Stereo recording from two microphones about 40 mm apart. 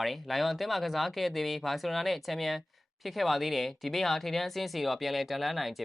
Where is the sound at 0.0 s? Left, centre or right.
Centre.